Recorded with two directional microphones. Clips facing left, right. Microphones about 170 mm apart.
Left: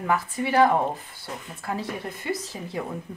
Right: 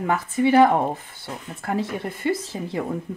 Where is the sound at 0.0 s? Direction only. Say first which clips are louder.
Right 5 dB; 25° right (ahead or behind).